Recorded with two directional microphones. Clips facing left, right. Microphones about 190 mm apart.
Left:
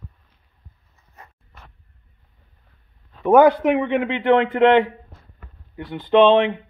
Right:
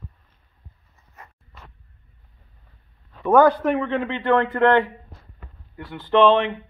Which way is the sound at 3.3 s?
15° left (ahead or behind).